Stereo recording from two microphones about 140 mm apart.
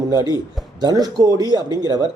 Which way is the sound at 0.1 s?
30° right (ahead or behind).